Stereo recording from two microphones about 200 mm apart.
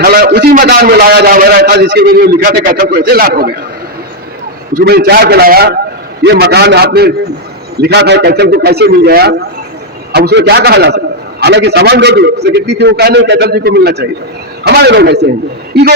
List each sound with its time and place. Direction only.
0.0 s a man's voice: 45° right (ahead or behind)
4.7 s a man's voice: 50° right (ahead or behind)